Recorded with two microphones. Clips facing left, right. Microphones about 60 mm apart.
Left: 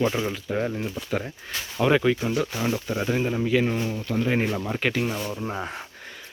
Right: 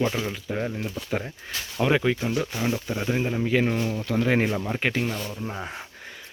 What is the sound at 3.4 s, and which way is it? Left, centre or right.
Speech, right.